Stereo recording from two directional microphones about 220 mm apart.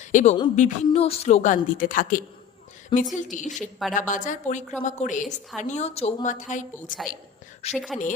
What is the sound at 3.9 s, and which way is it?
A woman's voice, 35° left (ahead or behind).